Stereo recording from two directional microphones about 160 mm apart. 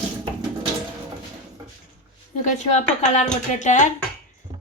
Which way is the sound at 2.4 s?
50° left (ahead or behind).